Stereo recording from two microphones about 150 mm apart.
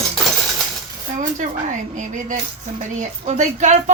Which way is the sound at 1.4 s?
55° right (ahead or behind).